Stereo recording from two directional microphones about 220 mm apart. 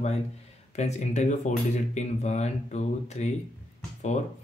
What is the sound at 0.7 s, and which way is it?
Speech, 30° left (ahead or behind).